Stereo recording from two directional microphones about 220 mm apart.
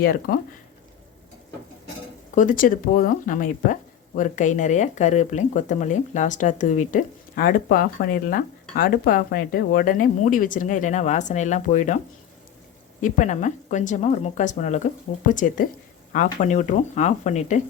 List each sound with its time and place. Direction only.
0.0 s speech: 40° left (ahead or behind)
2.3 s speech: 35° left (ahead or behind)
13.0 s speech: 35° left (ahead or behind)